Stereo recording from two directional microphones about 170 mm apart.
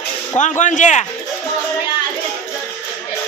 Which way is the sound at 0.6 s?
45° left (ahead or behind).